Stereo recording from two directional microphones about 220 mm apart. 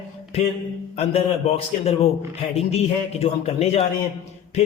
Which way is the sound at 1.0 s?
30° left (ahead or behind).